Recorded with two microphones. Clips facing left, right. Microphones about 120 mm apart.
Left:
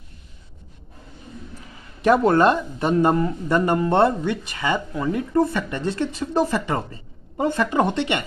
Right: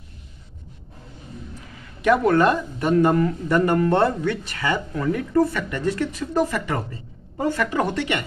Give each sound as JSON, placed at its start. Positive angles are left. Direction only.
{"t": 2.0, "sound": "speech", "side_deg": 30}